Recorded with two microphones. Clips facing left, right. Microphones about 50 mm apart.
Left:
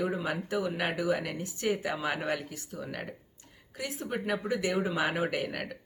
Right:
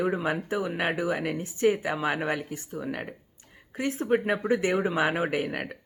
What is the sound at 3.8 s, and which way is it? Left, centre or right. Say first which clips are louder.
Speech: right 9 dB; right.